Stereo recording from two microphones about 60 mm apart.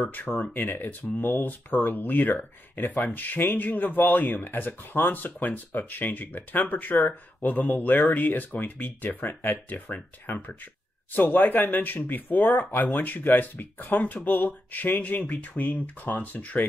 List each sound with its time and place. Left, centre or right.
0.3 s speech: left